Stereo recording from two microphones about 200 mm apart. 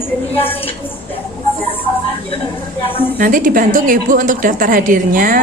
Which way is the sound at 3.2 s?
45° right (ahead or behind).